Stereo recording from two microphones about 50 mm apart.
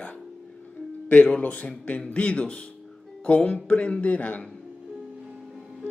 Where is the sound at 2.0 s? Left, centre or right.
Left.